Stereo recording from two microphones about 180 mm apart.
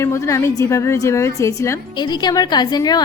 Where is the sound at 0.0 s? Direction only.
15° left (ahead or behind).